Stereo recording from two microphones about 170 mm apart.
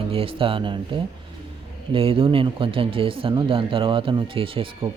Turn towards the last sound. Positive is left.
turn(degrees=-30)  # may be behind; listen again after turning